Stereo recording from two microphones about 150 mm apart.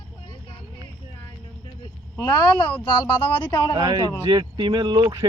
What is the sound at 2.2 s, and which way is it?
Speech, 25° left (ahead or behind).